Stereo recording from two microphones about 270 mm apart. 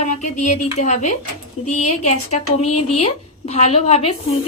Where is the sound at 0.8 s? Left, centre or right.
Left.